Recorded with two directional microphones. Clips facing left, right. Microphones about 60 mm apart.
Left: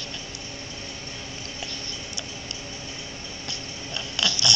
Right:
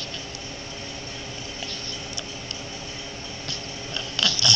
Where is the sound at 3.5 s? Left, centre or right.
Left.